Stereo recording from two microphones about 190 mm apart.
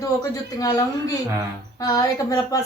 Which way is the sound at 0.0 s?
20° left (ahead or behind).